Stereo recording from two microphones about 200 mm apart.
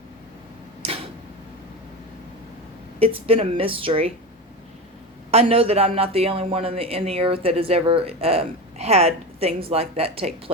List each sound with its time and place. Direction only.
3.0 s speech: 30° right (ahead or behind)
5.3 s speech: 30° right (ahead or behind)